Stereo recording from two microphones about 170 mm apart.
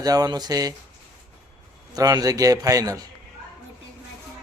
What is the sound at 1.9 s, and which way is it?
Speech, 20° right (ahead or behind).